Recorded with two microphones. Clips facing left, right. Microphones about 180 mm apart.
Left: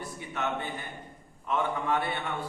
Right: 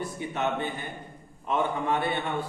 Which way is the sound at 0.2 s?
20° right (ahead or behind).